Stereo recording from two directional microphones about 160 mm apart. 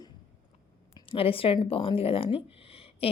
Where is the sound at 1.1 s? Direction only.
35° left (ahead or behind).